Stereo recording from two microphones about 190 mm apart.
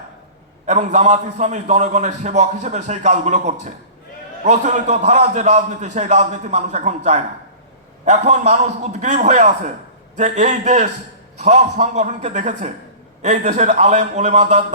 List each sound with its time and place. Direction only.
0.6 s a man's voice: 40° right (ahead or behind)